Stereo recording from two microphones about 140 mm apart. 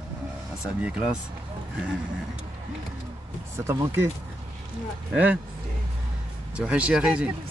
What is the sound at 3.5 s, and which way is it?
Speech, 20° right (ahead or behind).